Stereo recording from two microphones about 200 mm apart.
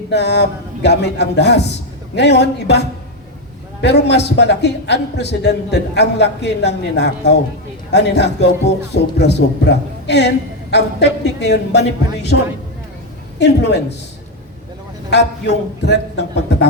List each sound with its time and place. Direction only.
0.1 s a man's voice: 55° left (ahead or behind)
13.4 s a man's voice: 55° left (ahead or behind)
15.1 s a man's voice: 60° left (ahead or behind)